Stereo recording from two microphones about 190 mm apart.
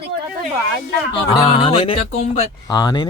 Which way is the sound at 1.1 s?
25° left (ahead or behind).